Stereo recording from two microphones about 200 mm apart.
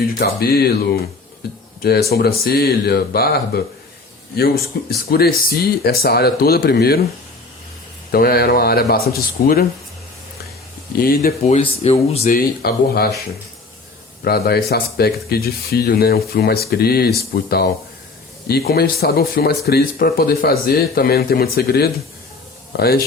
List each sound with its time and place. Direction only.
0.2 s speech: 50° left (ahead or behind)
1.8 s speech: 50° left (ahead or behind)
8.1 s speech: 50° left (ahead or behind)
10.9 s speech: 50° left (ahead or behind)
11.4 s speech: 30° left (ahead or behind)
12.2 s speech: 45° left (ahead or behind)
14.3 s speech: 50° left (ahead or behind)